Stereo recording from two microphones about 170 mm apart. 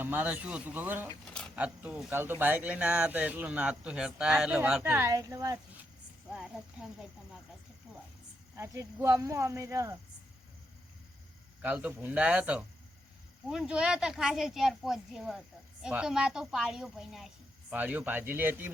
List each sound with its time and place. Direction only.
0.0 s speech: 10° right (ahead or behind)
1.3 s a sound: 5° left (ahead or behind)
1.5 s speech: 10° right (ahead or behind)
6.3 s speech: 5° right (ahead or behind)
8.5 s speech: 15° right (ahead or behind)
11.6 s speech: 10° right (ahead or behind)